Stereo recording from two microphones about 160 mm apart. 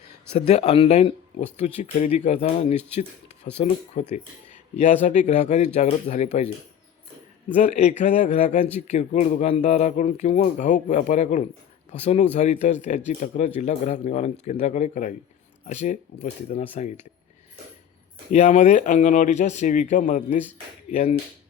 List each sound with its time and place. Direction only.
0.3 s speech: 40° left (ahead or behind)
5.0 s speech: 50° left (ahead or behind)
7.6 s speech: 45° left (ahead or behind)
18.3 s speech: 50° left (ahead or behind)